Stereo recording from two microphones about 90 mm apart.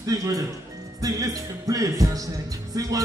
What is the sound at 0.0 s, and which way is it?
Speech, 40° right (ahead or behind).